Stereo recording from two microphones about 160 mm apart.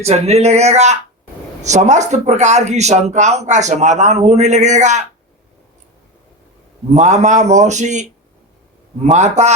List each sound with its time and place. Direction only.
0.0 s speech: 40° right (ahead or behind)
6.9 s speech: 45° right (ahead or behind)
9.0 s speech: 45° right (ahead or behind)